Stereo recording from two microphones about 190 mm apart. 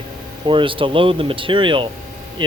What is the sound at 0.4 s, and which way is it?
Speech, 25° right (ahead or behind).